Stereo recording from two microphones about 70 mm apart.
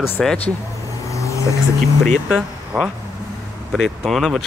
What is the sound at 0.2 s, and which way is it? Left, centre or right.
Speech, centre.